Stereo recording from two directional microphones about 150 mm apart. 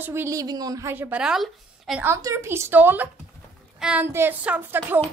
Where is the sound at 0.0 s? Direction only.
15° right (ahead or behind).